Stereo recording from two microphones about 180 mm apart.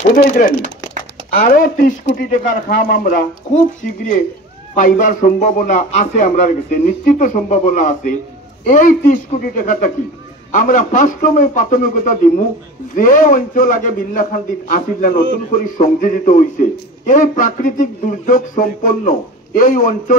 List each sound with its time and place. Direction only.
0.1 s a man's voice: 50° left (ahead or behind)
4.7 s a man's voice: 50° left (ahead or behind)